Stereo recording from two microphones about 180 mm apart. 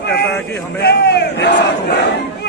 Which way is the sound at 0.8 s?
65° left (ahead or behind).